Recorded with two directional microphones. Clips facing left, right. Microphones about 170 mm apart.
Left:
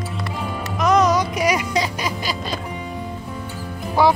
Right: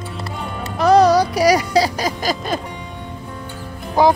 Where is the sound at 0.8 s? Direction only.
35° right (ahead or behind).